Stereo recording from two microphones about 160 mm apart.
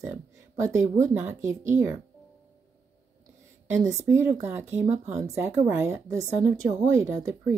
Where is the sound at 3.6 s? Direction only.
15° right (ahead or behind).